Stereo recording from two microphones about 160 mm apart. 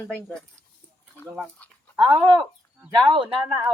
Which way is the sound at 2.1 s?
25° right (ahead or behind).